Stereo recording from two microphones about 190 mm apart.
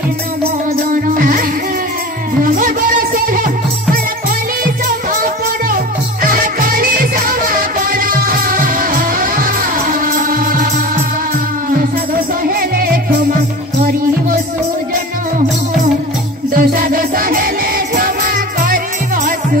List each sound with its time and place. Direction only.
1.1 s music: 45° right (ahead or behind)
2.4 s music: 45° right (ahead or behind)
6.2 s music: 45° right (ahead or behind)
12.4 s music: 50° right (ahead or behind)
16.5 s music: 50° right (ahead or behind)